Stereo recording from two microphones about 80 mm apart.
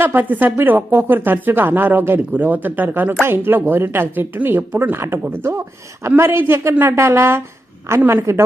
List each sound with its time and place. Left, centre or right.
0.0 s a man's voice: right